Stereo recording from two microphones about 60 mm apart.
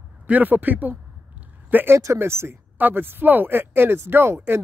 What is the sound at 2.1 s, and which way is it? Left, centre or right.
Speech, right.